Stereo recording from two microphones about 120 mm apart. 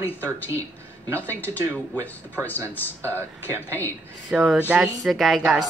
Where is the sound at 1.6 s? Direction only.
20° right (ahead or behind).